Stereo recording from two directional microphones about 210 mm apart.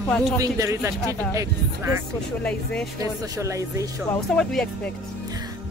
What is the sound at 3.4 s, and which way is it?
Speech, 15° right (ahead or behind).